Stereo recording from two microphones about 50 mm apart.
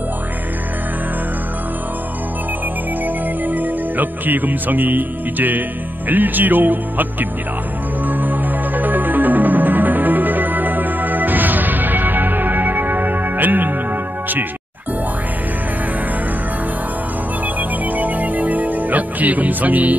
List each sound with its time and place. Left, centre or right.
3.4 s music: right
6.0 s speech: right
8.1 s music: right
17.6 s music: right